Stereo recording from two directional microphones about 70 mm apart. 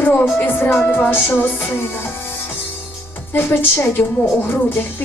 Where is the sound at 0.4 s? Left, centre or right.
Left.